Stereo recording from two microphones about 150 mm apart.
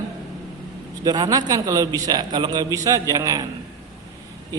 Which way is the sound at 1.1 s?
25° right (ahead or behind).